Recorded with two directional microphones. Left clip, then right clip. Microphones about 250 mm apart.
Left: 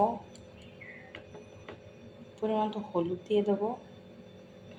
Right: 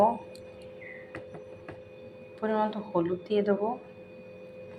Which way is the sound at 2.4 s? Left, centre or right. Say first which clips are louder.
Right 2 dB; centre.